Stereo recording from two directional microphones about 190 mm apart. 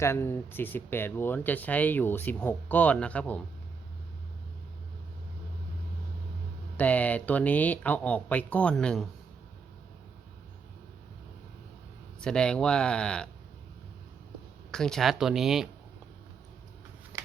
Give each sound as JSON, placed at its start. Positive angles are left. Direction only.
{"t": 0.0, "sound": "speech", "side_deg": 15}
{"t": 6.7, "sound": "speech", "side_deg": 10}
{"t": 12.2, "sound": "speech", "side_deg": 5}
{"t": 14.7, "sound": "speech", "side_deg": 5}
{"t": 17.1, "sound": "shuffling cards", "side_deg": -20}